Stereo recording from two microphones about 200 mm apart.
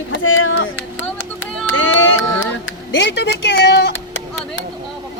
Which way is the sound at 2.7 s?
60° left (ahead or behind).